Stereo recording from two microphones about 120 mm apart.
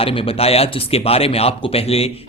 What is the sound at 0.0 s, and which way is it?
Speech, 50° left (ahead or behind).